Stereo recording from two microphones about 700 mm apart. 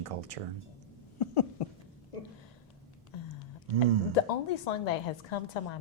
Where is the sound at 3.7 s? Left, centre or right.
Left.